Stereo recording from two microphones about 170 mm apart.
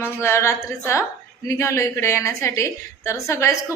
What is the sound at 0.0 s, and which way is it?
A woman's voice, 15° left (ahead or behind).